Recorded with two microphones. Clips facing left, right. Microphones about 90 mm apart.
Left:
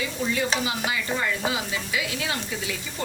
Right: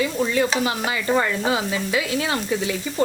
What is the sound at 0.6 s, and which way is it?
Speech, 50° right (ahead or behind).